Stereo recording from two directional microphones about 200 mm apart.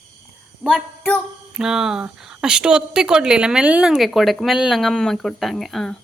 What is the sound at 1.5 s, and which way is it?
Speech, 5° right (ahead or behind).